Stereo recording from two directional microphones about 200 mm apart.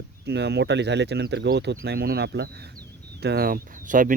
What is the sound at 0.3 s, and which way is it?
Speech, 55° right (ahead or behind).